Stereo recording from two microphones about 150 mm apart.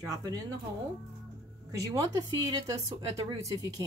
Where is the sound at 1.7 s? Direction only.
25° right (ahead or behind).